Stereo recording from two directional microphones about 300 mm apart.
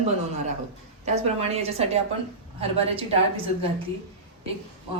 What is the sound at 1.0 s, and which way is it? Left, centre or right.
A woman's voice, right.